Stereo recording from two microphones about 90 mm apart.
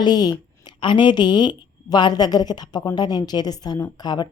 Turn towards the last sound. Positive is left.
turn(degrees=50)  # may be behind; listen again after turning